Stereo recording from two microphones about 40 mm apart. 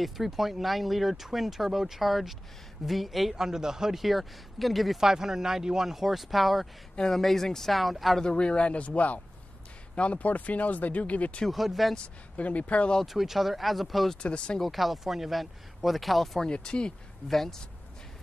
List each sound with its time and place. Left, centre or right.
0.0 s speech: centre
4.0 s speech: centre
5.0 s speech: centre
8.2 s speech: left
11.5 s speech: centre
12.0 s speech: left
13.0 s speech: centre
14.2 s speech: left
14.6 s speech: centre
16.4 s speech: left
17.3 s speech: centre